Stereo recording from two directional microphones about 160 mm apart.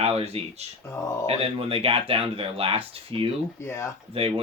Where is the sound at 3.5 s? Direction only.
15° left (ahead or behind).